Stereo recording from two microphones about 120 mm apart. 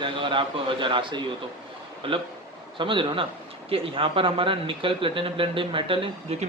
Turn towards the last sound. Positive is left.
turn(degrees=-45)  # may be behind; listen again after turning